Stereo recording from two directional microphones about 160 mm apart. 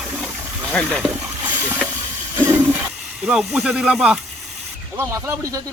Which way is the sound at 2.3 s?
15° right (ahead or behind).